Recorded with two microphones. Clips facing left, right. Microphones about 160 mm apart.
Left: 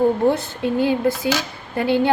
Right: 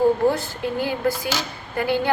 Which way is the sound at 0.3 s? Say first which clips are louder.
Left 3 dB; 25° left (ahead or behind).